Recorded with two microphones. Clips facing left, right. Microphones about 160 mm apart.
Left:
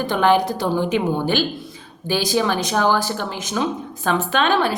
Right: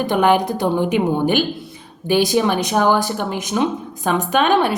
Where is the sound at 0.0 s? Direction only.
15° right (ahead or behind).